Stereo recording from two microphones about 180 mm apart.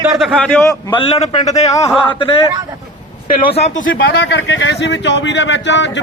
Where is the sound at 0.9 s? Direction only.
30° left (ahead or behind).